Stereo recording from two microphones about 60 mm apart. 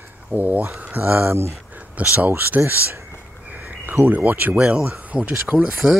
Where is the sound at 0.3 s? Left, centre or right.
Right.